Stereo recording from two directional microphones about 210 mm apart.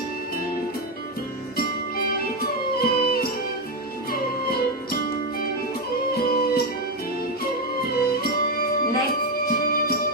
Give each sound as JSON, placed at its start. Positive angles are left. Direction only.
{"t": 1.5, "sound": "music", "side_deg": 45}
{"t": 6.1, "sound": "music", "side_deg": 45}
{"t": 7.9, "sound": "music", "side_deg": 45}